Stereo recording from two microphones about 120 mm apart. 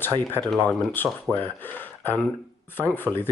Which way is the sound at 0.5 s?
15° left (ahead or behind).